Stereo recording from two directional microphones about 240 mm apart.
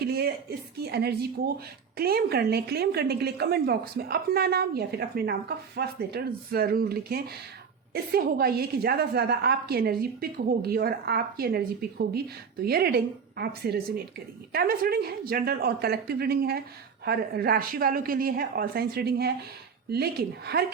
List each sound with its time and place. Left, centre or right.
0.0 s a woman's voice: right